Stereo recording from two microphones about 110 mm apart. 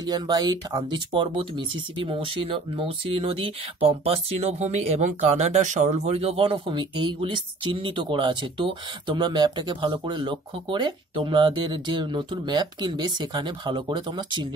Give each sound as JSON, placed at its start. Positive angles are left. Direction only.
{"t": 0.0, "sound": "speech", "side_deg": -40}
{"t": 6.5, "sound": "speech", "side_deg": -45}